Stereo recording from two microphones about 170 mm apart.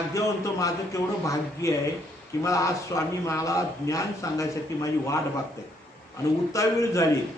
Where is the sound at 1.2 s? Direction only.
20° left (ahead or behind).